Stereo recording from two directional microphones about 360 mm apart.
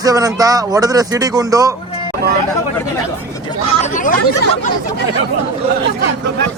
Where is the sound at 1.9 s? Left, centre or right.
Centre.